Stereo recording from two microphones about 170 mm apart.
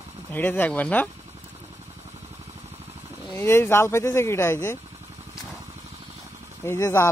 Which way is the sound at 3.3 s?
15° left (ahead or behind).